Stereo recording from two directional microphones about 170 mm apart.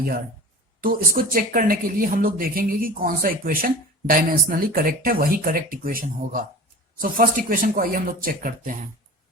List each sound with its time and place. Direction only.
0.8 s speech: 55° right (ahead or behind)